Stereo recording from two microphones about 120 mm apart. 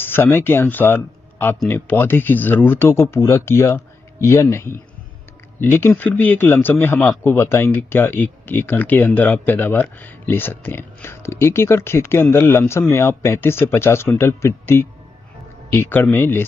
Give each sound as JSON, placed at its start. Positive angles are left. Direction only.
{"t": 0.0, "sound": "speech", "side_deg": 15}